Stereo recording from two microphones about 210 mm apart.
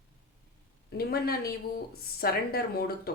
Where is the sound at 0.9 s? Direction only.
45° left (ahead or behind).